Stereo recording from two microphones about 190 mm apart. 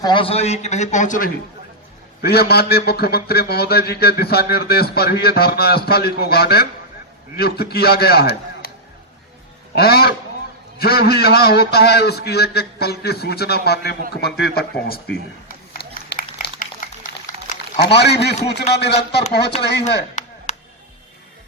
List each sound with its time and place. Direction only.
0.0 s a man's voice: 25° left (ahead or behind); by 1.3 s 40° left (ahead or behind)
2.2 s a man's voice: 55° left (ahead or behind)
9.7 s a man's voice: 55° left (ahead or behind)
15.4 s a sound: 50° left (ahead or behind)
16.4 s liquid: 45° left (ahead or behind)
17.7 s a man's voice: 60° left (ahead or behind)
20.2 s a sound: 40° left (ahead or behind)